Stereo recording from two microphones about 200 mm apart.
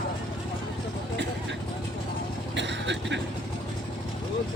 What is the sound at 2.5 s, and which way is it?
Vehicle, 60° right (ahead or behind).